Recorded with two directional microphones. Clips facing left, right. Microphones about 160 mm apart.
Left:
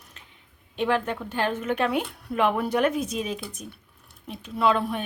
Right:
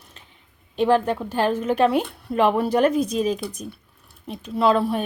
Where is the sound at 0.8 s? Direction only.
35° right (ahead or behind).